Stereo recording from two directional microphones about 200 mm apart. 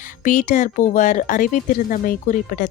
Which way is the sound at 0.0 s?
40° left (ahead or behind).